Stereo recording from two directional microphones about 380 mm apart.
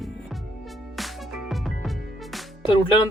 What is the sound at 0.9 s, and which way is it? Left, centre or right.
Music, centre.